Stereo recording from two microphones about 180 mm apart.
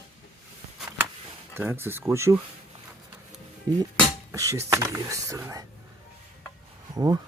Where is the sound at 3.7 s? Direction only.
20° right (ahead or behind).